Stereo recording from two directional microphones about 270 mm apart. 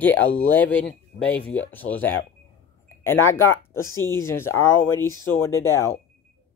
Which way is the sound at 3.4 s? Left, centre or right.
Centre.